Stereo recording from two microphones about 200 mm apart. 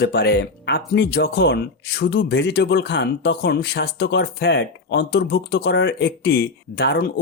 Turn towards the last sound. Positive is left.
turn(degrees=55)  # may be behind; listen again after turning